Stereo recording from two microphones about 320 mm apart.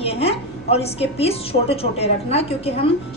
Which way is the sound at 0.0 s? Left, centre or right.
Centre.